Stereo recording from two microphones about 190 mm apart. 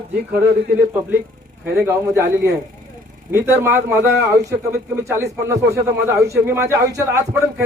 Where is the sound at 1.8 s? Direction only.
15° right (ahead or behind).